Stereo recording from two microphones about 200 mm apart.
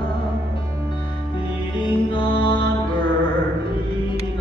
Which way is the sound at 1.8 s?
25° left (ahead or behind).